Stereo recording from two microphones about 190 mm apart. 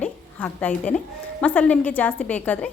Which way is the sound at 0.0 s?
5° left (ahead or behind).